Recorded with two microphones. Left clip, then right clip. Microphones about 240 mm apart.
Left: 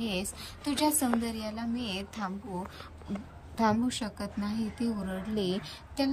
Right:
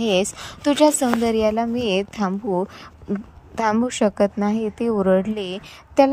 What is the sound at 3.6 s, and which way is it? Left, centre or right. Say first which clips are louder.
A woman's voice: right 10 dB; centre.